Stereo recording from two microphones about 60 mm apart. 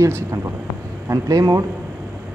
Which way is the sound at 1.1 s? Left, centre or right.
Right.